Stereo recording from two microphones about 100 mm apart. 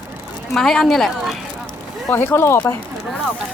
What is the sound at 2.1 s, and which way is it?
Speech, 20° left (ahead or behind).